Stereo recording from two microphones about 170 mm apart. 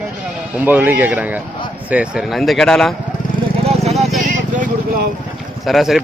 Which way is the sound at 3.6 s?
35° right (ahead or behind).